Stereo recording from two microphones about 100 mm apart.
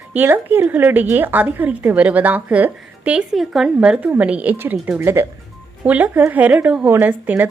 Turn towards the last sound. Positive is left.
turn(degrees=-20)  # may be behind; listen again after turning